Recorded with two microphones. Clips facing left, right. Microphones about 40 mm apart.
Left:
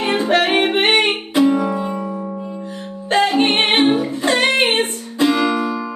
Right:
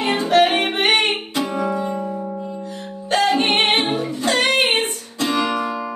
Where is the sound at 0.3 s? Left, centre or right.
Left.